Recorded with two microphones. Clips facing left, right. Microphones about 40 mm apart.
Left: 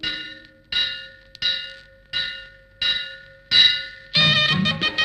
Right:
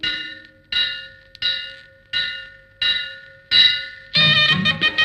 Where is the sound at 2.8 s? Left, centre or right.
Right.